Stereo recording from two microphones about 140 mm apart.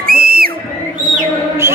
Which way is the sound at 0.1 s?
90° right.